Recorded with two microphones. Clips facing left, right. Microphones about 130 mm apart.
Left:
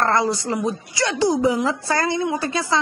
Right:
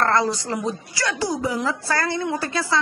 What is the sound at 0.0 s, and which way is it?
A woman's voice, 15° left (ahead or behind).